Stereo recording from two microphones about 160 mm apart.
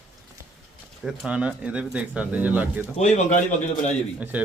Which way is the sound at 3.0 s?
45° left (ahead or behind).